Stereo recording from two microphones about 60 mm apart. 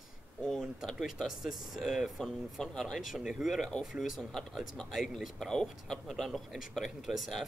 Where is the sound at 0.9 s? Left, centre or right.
Centre.